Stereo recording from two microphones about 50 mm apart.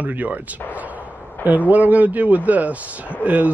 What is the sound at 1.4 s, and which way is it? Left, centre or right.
Speech, right.